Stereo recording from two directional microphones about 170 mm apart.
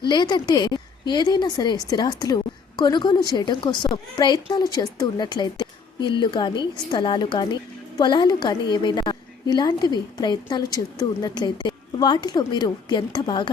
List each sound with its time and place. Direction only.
0.1 s speech: 25° left (ahead or behind)